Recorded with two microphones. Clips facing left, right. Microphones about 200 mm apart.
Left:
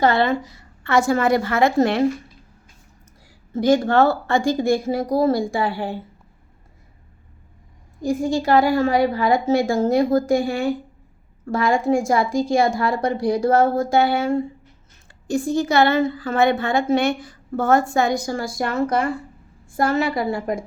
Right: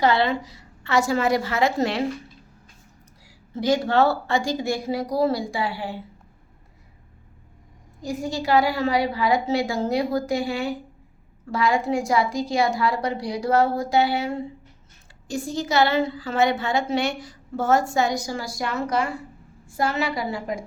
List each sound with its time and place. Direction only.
0.0 s a woman's voice: 50° left (ahead or behind)
3.2 s a woman's voice: 50° left (ahead or behind)
8.0 s a woman's voice: 50° left (ahead or behind)